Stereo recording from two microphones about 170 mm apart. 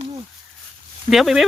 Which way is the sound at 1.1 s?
Centre (ahead or behind).